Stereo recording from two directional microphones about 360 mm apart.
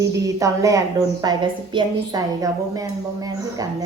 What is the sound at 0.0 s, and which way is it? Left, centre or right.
A woman's voice, centre.